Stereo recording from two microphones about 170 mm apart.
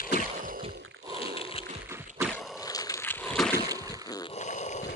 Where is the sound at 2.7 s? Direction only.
20° left (ahead or behind).